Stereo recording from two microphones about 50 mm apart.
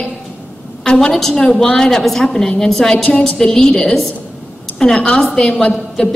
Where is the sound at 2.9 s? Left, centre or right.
Centre.